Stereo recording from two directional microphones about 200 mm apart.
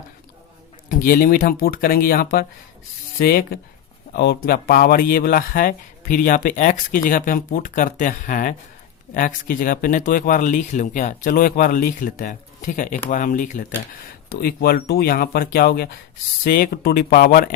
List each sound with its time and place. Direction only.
0.9 s speech: 45° left (ahead or behind)